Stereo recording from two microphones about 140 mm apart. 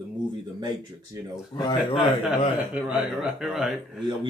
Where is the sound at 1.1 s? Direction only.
25° right (ahead or behind).